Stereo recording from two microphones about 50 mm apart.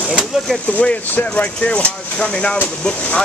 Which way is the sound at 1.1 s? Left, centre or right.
Left.